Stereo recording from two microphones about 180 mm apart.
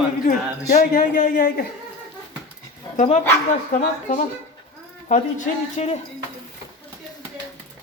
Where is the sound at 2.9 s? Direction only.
40° left (ahead or behind).